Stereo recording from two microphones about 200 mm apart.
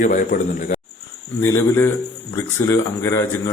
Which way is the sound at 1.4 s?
10° left (ahead or behind).